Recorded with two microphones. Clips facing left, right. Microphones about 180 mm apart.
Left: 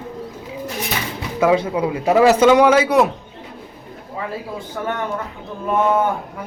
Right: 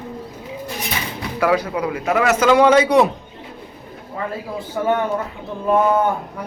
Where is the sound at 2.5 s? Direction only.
10° left (ahead or behind).